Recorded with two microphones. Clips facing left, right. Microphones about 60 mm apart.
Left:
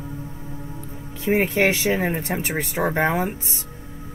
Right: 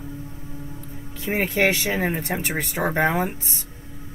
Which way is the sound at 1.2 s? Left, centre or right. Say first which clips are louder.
Left 2 dB; left.